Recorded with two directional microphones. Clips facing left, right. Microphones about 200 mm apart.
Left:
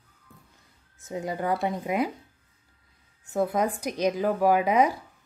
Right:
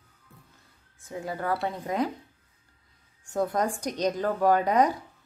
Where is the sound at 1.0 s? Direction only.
20° left (ahead or behind).